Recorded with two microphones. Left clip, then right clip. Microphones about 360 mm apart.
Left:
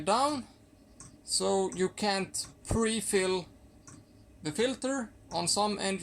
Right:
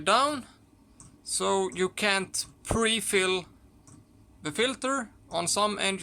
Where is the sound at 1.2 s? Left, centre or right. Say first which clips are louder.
Right 2 dB; right.